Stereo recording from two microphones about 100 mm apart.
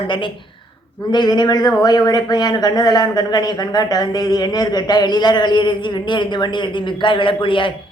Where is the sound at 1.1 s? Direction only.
45° left (ahead or behind).